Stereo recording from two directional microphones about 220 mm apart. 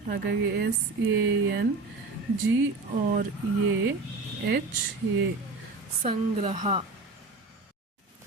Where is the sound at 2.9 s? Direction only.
40° right (ahead or behind).